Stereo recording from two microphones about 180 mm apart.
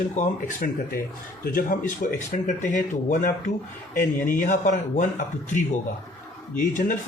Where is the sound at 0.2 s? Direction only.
50° left (ahead or behind).